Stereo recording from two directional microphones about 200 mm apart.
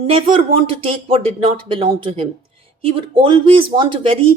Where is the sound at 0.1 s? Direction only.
25° right (ahead or behind).